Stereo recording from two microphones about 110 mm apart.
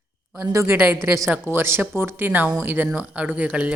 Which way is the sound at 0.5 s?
20° right (ahead or behind).